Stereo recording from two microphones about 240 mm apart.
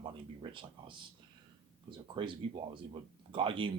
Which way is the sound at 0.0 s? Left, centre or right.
Centre.